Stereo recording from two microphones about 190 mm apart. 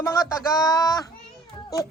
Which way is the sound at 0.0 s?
15° left (ahead or behind).